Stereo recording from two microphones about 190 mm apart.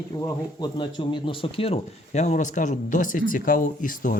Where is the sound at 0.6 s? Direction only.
25° left (ahead or behind).